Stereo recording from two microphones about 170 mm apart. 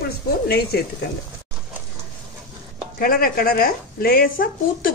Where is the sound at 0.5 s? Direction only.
65° left (ahead or behind).